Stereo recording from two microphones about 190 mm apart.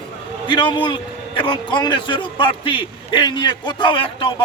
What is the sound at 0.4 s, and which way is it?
A man's voice, 25° left (ahead or behind).